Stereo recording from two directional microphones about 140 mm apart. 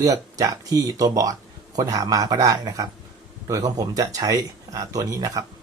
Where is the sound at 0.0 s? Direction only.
25° right (ahead or behind).